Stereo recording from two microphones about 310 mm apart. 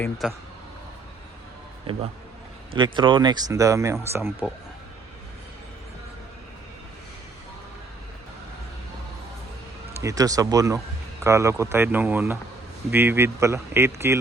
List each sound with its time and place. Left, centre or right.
0.0 s speech: centre
1.9 s speech: centre
10.0 s speech: centre